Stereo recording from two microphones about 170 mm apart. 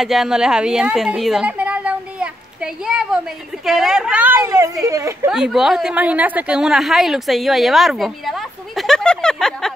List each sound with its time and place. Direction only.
0.0 s a woman's voice: centre (ahead or behind); by 5.3 s 20° right (ahead or behind)
5.3 s a woman's voice: 5° right (ahead or behind)